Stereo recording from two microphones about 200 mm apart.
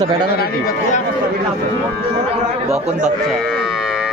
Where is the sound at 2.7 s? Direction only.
35° right (ahead or behind).